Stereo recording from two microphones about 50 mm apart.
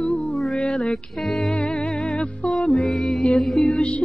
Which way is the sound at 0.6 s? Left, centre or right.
Left.